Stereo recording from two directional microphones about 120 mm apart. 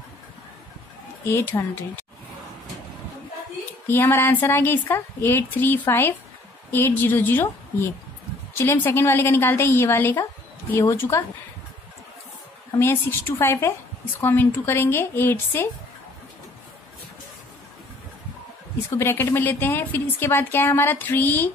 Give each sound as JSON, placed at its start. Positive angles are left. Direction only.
{"t": 1.2, "sound": "a woman's voice", "side_deg": 20}
{"t": 3.8, "sound": "a woman's voice", "side_deg": 20}
{"t": 12.7, "sound": "a woman's voice", "side_deg": 20}
{"t": 18.9, "sound": "a woman's voice", "side_deg": 20}